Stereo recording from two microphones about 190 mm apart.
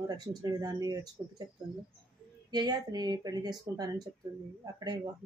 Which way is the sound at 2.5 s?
20° right (ahead or behind).